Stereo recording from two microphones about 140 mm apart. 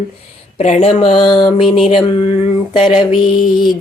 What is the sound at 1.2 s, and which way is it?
Speech, 35° left (ahead or behind).